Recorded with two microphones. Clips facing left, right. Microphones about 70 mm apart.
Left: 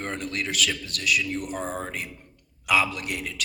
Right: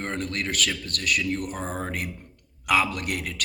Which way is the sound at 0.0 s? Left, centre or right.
Right.